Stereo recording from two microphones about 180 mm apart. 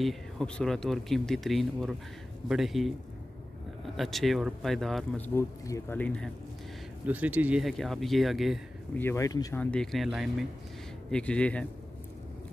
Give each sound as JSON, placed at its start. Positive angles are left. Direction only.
{"t": 0.0, "sound": "speech", "side_deg": 0}
{"t": 3.9, "sound": "speech", "side_deg": 0}
{"t": 7.1, "sound": "speech", "side_deg": -10}
{"t": 9.0, "sound": "speech", "side_deg": 15}
{"t": 9.6, "sound": "speech", "side_deg": 5}